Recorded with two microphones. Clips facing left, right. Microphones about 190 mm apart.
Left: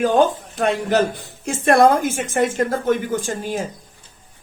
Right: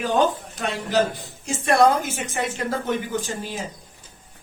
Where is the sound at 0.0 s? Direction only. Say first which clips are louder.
Left 5 dB; 50° left (ahead or behind).